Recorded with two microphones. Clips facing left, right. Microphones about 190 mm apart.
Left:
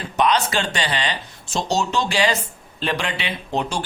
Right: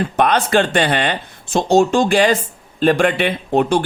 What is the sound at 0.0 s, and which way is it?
A man's voice, 55° right (ahead or behind).